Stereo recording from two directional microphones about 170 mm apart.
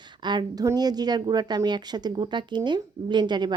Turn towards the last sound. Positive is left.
turn(degrees=-25)  # may be behind; listen again after turning